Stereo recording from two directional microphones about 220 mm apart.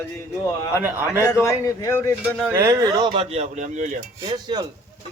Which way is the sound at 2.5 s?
15° right (ahead or behind).